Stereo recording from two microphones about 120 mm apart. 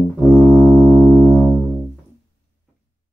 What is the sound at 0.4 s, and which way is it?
Music, 55° right (ahead or behind).